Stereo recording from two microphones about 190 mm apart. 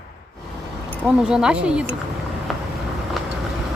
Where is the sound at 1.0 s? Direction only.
5° right (ahead or behind).